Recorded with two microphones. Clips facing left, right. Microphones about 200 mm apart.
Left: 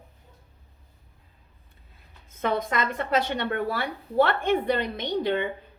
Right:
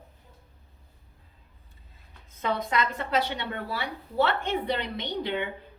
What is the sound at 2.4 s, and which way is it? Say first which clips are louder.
A woman's voice: left 2 dB; 50° left (ahead or behind).